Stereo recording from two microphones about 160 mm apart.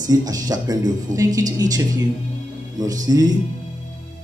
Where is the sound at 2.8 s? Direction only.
25° right (ahead or behind).